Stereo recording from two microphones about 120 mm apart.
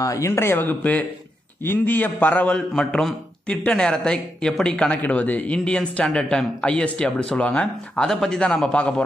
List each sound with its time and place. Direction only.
0.0 s a man's voice: 25° left (ahead or behind); by 9.0 s 10° left (ahead or behind)